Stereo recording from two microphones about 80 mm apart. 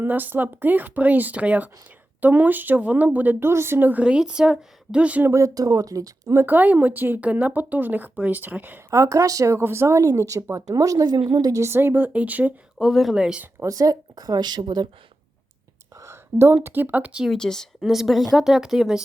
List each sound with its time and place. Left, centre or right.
0.0 s speech: right
3.5 s speech: right
4.0 s speech: centre
5.3 s a woman's voice: right
6.3 s speech: right
8.9 s a woman's voice: right
11.6 s speech: right
12.8 s speech: centre
13.6 s a woman's voice: right
16.0 s a sound: right
16.6 s speech: right
17.2 s speech: centre